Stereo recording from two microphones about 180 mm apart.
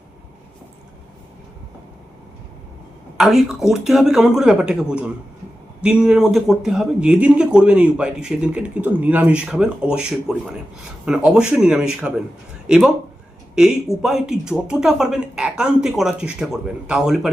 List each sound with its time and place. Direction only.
3.2 s speech: centre (ahead or behind)